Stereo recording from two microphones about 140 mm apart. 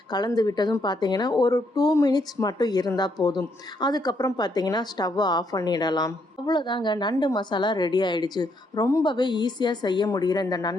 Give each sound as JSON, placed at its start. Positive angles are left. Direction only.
{"t": 0.1, "sound": "speech", "side_deg": 30}